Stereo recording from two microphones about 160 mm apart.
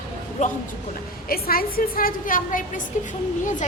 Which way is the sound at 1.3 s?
70° left (ahead or behind).